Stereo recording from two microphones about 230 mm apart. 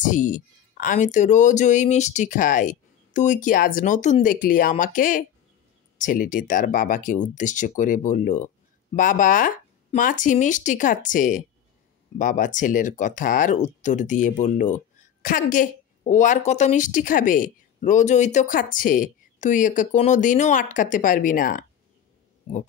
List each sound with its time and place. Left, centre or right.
0.0 s speech: left